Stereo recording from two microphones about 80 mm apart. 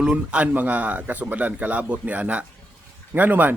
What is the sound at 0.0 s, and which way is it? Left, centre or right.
A man's voice, centre.